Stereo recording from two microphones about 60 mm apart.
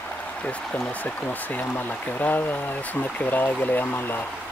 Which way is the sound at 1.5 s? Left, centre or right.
Left.